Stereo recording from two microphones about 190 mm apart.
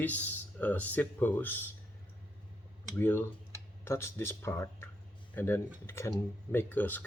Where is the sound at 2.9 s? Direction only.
10° left (ahead or behind).